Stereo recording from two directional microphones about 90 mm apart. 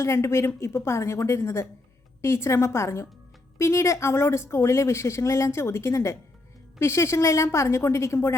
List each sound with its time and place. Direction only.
0.0 s speech: 30° left (ahead or behind)